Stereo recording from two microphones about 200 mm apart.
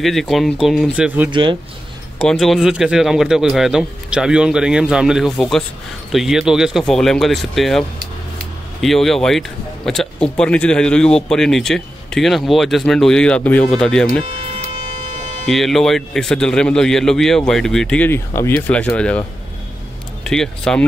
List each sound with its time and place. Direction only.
0.0 s speech: centre (ahead or behind)
1.3 s speech: 25° right (ahead or behind)
2.1 s speech: centre (ahead or behind)
8.8 s speech: centre (ahead or behind)
15.5 s speech: centre (ahead or behind)
20.2 s speech: 5° left (ahead or behind)